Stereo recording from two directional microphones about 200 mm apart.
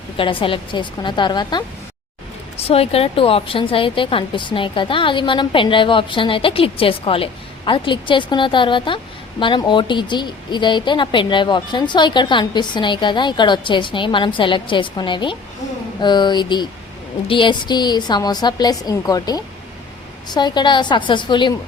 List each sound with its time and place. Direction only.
0.2 s a woman's voice: 25° left (ahead or behind)
2.6 s a woman's voice: 30° left (ahead or behind)